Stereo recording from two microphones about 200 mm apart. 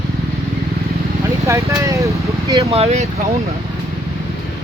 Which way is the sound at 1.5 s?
15° right (ahead or behind).